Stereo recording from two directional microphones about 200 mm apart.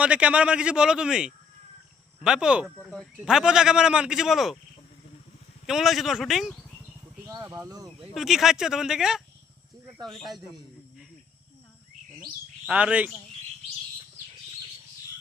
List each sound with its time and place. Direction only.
0.0 s speech: 5° right (ahead or behind)
5.6 s speech: centre (ahead or behind)
7.4 s speech: 15° right (ahead or behind)
8.1 s a man's voice: centre (ahead or behind)
12.6 s speech: 5° right (ahead or behind)